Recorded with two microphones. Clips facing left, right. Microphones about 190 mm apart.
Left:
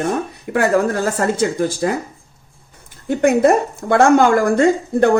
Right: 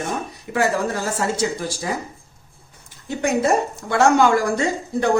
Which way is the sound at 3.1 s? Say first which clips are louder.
Left 6 dB; 55° left (ahead or behind).